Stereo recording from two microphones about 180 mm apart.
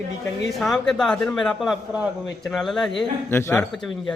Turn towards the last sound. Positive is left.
turn(degrees=0)  # may be behind; listen again after turning